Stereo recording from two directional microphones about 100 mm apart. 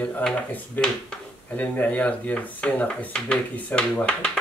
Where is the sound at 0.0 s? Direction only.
15° left (ahead or behind).